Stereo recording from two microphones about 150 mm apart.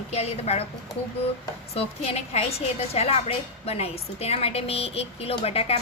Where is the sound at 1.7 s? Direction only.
45° left (ahead or behind).